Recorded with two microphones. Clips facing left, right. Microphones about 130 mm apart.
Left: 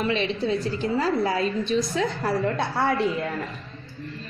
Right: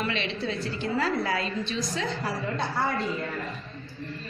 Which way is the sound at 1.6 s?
45° left (ahead or behind).